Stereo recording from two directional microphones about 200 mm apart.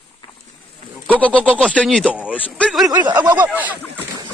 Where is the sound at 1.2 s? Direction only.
5° left (ahead or behind).